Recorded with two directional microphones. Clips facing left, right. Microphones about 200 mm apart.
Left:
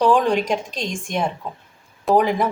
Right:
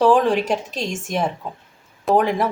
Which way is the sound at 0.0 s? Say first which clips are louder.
Right 1 dB; centre (ahead or behind).